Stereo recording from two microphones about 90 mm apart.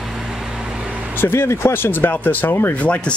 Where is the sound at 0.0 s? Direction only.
5° right (ahead or behind).